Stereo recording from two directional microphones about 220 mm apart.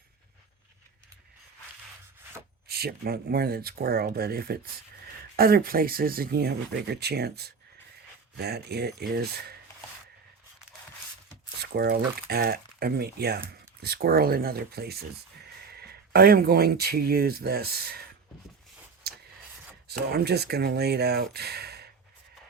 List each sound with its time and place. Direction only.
2.6 s speech: 45° right (ahead or behind)
11.6 s speech: 45° right (ahead or behind)
19.1 s a sound: 45° right (ahead or behind)
19.9 s speech: 45° right (ahead or behind)